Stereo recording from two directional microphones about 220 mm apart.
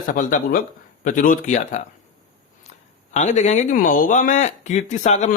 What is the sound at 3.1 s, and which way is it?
Speech, 30° left (ahead or behind).